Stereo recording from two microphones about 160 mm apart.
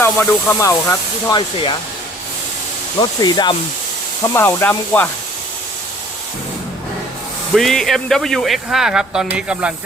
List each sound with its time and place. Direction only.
0.0 s speech: 15° left (ahead or behind)
3.0 s speech: 25° left (ahead or behind)
4.2 s speech: 15° left (ahead or behind)
7.5 s speech: centre (ahead or behind)